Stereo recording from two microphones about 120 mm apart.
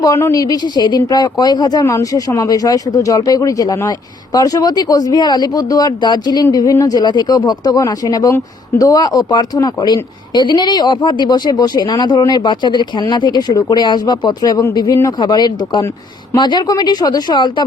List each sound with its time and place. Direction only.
0.0 s speech: 25° left (ahead or behind)